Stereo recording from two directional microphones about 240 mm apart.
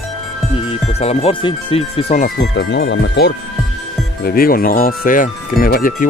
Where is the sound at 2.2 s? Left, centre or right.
Left.